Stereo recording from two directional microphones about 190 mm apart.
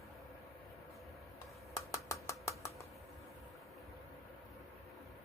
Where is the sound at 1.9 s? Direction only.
15° left (ahead or behind).